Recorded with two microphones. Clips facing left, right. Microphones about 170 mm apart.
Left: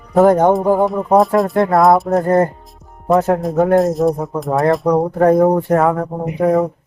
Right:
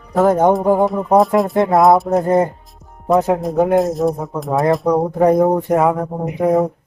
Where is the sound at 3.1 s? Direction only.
15° right (ahead or behind).